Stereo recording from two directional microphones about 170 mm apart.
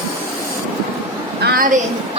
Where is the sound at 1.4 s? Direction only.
55° right (ahead or behind).